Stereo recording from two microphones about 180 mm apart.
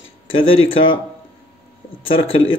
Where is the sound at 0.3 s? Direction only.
90° left.